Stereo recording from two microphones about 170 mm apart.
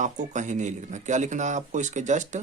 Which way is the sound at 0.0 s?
45° right (ahead or behind).